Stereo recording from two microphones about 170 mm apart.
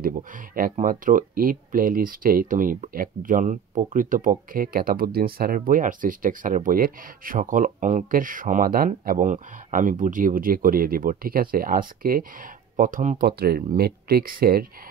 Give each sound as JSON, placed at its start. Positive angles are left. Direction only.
{"t": 0.6, "sound": "speech", "side_deg": -55}
{"t": 13.4, "sound": "speech", "side_deg": -65}